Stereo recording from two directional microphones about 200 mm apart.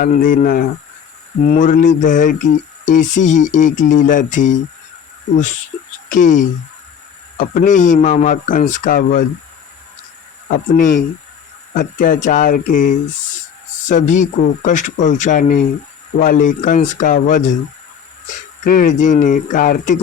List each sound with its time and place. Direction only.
0.0 s a man's voice: 45° left (ahead or behind)
6.1 s a man's voice: 40° left (ahead or behind)
10.5 s a man's voice: 40° left (ahead or behind)
18.6 s a man's voice: 45° left (ahead or behind)